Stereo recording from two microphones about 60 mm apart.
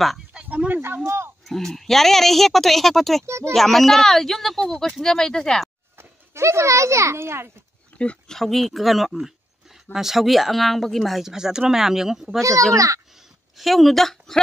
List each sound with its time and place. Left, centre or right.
0.3 s a sound: centre
1.0 s a sound: right
1.4 s speech: centre
3.3 s speech: right
3.5 s speech: centre
5.9 s a child's voice: right
7.9 s a sound: left
8.3 s speech: centre
12.4 s a child's voice: right
13.6 s speech: centre